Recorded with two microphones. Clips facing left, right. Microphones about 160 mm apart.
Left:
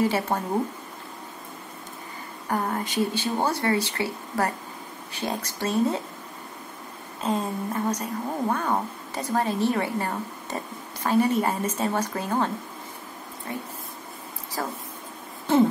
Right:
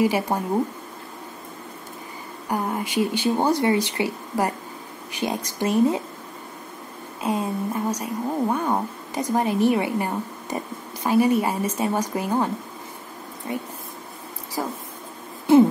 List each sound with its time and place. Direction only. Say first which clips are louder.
0.0 s speech: right 3 dB; 10° right (ahead or behind)
2.4 s speech: right 1 dB; 10° right (ahead or behind)
7.2 s speech: right 2 dB; 10° right (ahead or behind)
13.5 s speech: right 4 dB; 15° right (ahead or behind)